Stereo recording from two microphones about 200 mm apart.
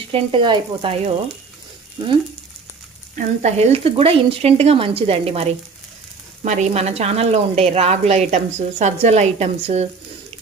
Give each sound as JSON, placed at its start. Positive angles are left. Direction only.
{"t": 0.1, "sound": "speech", "side_deg": -25}
{"t": 3.2, "sound": "a woman's voice", "side_deg": -35}